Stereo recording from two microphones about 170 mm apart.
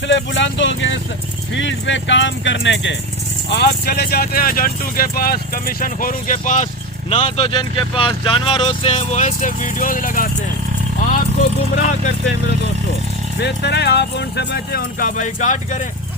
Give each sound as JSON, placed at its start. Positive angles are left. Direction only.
{"t": 0.1, "sound": "speech", "side_deg": 90}
{"t": 3.5, "sound": "speech", "side_deg": 75}
{"t": 7.1, "sound": "speech", "side_deg": 35}
{"t": 11.8, "sound": "speech", "side_deg": 45}
{"t": 13.4, "sound": "speech", "side_deg": 85}